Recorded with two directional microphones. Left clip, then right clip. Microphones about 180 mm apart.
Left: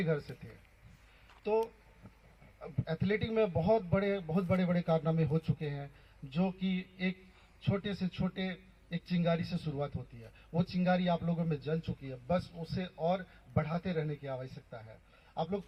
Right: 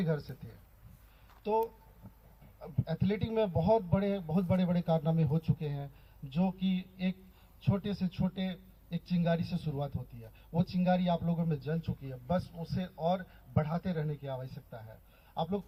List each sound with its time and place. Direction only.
0.0 s a man's voice: 50° left (ahead or behind)
2.6 s a man's voice: 50° left (ahead or behind)